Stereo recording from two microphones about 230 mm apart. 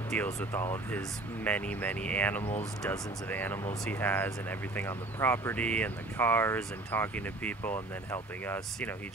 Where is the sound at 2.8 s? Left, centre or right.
Centre.